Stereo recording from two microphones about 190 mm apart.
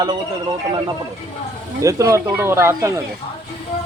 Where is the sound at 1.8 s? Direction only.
15° right (ahead or behind).